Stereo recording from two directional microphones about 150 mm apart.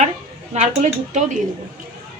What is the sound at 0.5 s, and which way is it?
Speech, 50° right (ahead or behind).